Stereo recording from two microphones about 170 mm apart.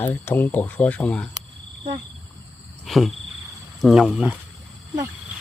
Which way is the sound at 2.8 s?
Centre (ahead or behind).